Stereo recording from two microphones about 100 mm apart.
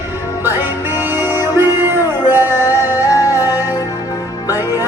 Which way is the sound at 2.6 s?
40° left (ahead or behind).